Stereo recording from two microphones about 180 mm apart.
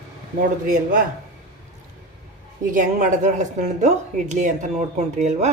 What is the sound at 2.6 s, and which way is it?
A woman's voice, 45° right (ahead or behind).